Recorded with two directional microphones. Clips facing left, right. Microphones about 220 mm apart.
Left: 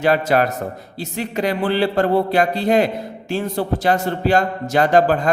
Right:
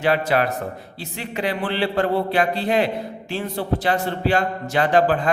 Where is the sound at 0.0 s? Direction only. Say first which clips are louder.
Left 3 dB; 45° left (ahead or behind).